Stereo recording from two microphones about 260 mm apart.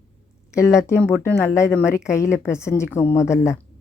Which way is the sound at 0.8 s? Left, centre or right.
Centre.